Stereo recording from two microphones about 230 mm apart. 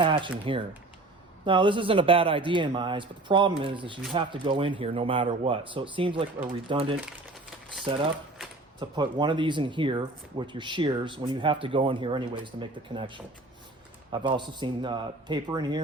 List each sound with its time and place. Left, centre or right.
0.0 s speech: right